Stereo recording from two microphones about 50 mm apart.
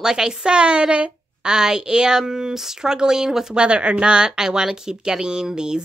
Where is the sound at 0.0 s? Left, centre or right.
Centre.